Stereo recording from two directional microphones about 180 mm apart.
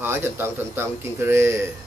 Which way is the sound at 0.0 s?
15° right (ahead or behind).